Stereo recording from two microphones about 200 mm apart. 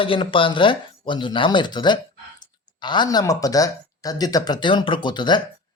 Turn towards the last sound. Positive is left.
turn(degrees=20)  # may be behind; listen again after turning